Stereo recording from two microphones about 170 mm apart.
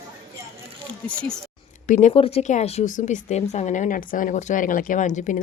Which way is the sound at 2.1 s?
35° left (ahead or behind).